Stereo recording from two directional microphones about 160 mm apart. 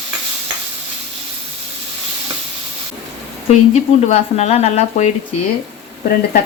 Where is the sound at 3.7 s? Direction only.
40° left (ahead or behind).